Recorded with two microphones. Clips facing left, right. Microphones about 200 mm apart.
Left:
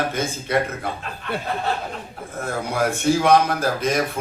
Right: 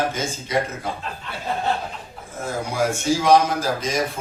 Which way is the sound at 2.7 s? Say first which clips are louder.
Left 2 dB; 60° left (ahead or behind).